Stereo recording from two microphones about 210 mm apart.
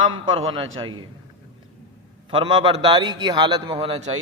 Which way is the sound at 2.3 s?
25° right (ahead or behind).